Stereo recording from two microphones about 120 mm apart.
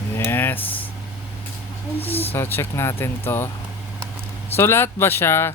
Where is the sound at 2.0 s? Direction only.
15° left (ahead or behind).